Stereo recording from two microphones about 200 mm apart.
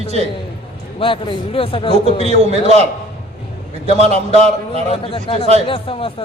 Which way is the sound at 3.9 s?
30° right (ahead or behind).